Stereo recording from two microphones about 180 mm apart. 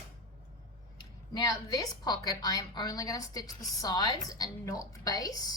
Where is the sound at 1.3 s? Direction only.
20° left (ahead or behind).